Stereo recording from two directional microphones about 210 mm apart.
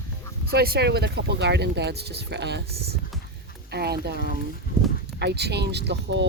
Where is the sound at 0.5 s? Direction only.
50° right (ahead or behind).